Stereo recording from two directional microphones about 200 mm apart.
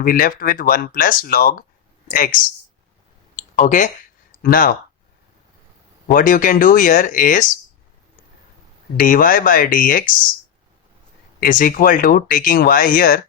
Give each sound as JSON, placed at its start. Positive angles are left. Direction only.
{"t": 0.0, "sound": "speech", "side_deg": 45}
{"t": 3.5, "sound": "speech", "side_deg": 40}
{"t": 6.1, "sound": "speech", "side_deg": 40}
{"t": 9.0, "sound": "speech", "side_deg": 45}
{"t": 11.4, "sound": "speech", "side_deg": 45}